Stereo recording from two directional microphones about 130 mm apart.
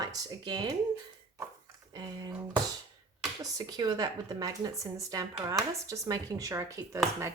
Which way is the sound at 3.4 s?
30° right (ahead or behind).